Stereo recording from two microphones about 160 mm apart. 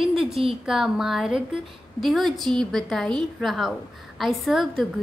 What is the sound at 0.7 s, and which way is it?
A woman's voice, 5° right (ahead or behind).